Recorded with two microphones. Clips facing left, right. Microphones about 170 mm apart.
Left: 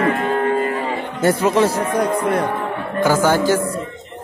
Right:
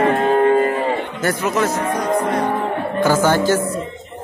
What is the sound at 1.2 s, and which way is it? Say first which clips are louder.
Speech: left 6 dB; 30° left (ahead or behind).